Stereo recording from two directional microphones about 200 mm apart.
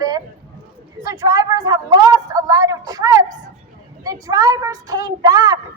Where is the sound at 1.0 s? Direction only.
20° right (ahead or behind).